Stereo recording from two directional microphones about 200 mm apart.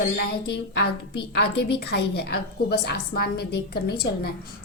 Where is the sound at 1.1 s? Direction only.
55° left (ahead or behind).